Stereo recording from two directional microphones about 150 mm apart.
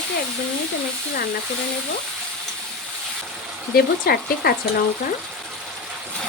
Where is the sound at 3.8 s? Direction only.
90° left.